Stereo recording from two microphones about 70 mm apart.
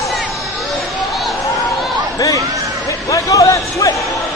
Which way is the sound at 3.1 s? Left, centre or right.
Left.